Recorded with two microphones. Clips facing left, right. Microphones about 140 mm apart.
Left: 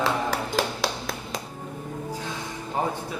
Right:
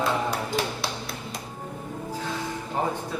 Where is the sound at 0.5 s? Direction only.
90° left.